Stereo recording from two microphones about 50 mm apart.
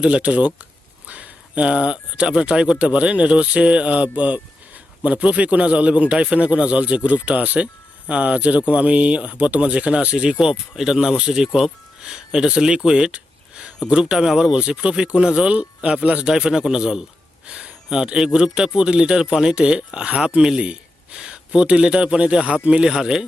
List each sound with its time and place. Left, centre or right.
0.0 s a man's voice: right